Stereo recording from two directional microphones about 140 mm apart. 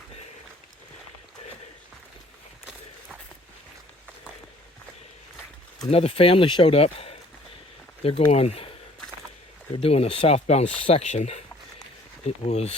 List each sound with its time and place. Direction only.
5.9 s speech: 45° left (ahead or behind)
9.7 s speech: 45° left (ahead or behind)